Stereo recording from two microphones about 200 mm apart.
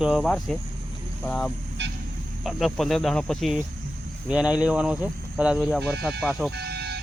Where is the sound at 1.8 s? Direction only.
60° right (ahead or behind).